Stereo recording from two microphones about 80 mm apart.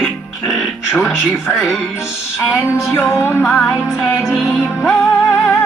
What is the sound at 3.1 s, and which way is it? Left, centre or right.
Music, left.